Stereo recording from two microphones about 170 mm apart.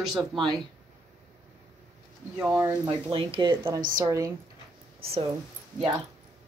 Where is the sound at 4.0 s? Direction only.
20° right (ahead or behind).